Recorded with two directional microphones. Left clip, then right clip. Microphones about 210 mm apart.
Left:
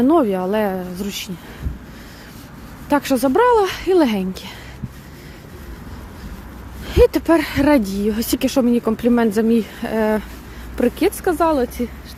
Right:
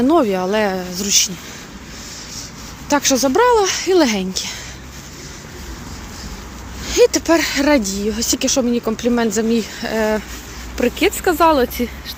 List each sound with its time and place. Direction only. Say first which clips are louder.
0.0 s speech: right 1 dB; 15° left (ahead or behind)
2.9 s speech: right 1 dB; 20° left (ahead or behind)
6.8 s speech: right 1 dB; 20° left (ahead or behind)
11.2 s speech: right 5 dB; 10° left (ahead or behind)